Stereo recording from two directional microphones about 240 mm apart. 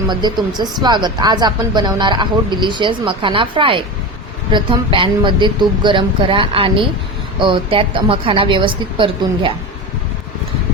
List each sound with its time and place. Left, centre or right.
0.1 s speech: centre